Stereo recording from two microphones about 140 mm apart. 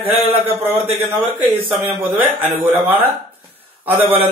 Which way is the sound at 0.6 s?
15° right (ahead or behind).